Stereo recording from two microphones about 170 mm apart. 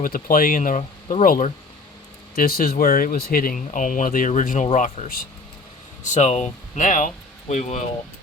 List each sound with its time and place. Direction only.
0.0 s speech: 55° left (ahead or behind)